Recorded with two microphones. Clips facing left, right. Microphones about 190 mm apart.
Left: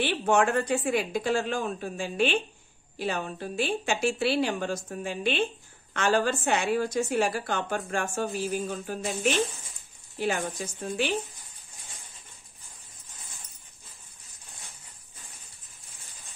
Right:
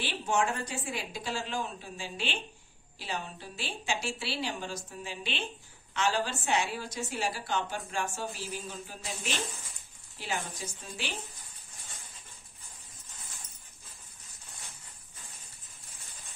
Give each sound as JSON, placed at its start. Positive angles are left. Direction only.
{"t": 0.0, "sound": "a woman's voice", "side_deg": 60}
{"t": 10.1, "sound": "speech", "side_deg": 55}